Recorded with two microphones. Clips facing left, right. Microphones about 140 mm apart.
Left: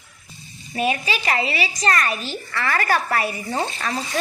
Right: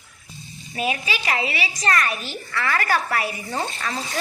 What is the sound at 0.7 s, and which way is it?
A woman's voice, centre (ahead or behind).